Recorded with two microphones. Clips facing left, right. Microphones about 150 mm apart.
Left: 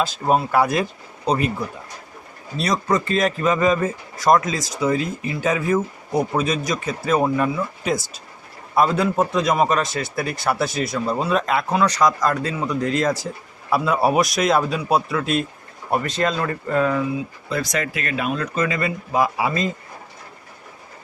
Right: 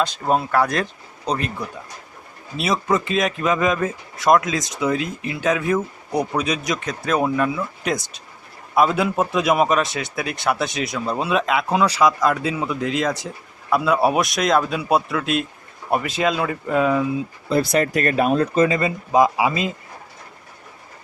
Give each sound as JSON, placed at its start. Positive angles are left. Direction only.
{"t": 0.0, "sound": "speech", "side_deg": 5}
{"t": 2.6, "sound": "speech", "side_deg": -5}
{"t": 17.5, "sound": "speech", "side_deg": -30}